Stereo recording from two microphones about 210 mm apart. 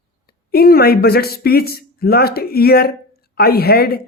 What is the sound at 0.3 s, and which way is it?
A woman's voice, 45° left (ahead or behind).